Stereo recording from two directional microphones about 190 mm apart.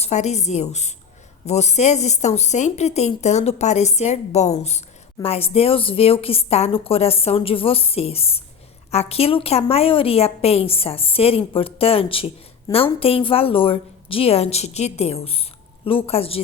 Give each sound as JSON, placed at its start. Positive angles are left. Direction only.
{"t": 0.0, "sound": "a woman's voice", "side_deg": 35}